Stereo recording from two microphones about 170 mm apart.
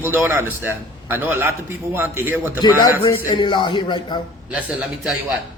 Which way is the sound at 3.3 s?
25° left (ahead or behind).